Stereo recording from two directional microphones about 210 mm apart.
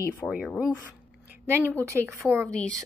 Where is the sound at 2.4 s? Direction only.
5° left (ahead or behind).